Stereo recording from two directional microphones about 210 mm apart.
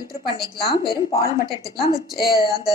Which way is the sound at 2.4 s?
15° right (ahead or behind).